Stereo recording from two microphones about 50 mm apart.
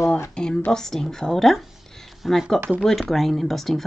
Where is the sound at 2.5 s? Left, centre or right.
Right.